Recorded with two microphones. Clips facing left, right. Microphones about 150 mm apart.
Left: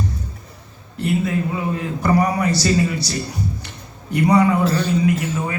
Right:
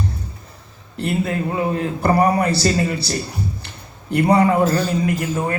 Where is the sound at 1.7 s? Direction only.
55° right (ahead or behind).